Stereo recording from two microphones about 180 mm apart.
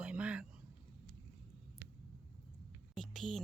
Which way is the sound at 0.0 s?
5° right (ahead or behind).